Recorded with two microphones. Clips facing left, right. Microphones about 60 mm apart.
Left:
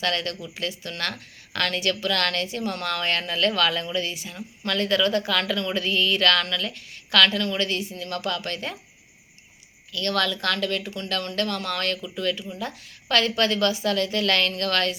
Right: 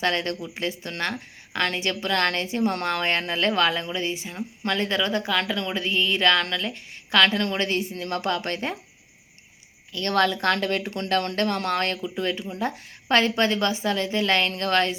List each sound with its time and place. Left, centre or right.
0.0 s a woman's voice: right
9.9 s a woman's voice: right